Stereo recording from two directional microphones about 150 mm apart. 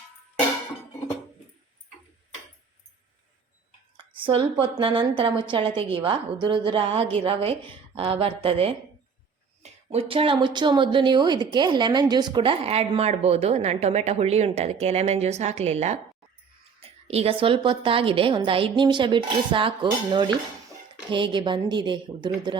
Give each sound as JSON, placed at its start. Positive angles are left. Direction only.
{"t": 3.9, "sound": "a sound", "side_deg": -35}
{"t": 4.6, "sound": "a woman's voice", "side_deg": -35}
{"t": 9.9, "sound": "a woman's voice", "side_deg": -40}